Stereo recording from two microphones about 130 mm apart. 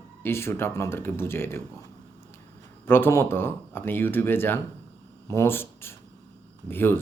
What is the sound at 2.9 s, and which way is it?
A man's voice, 15° left (ahead or behind).